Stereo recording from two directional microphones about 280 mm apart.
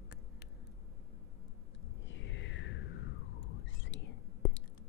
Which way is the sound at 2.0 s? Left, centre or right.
Left.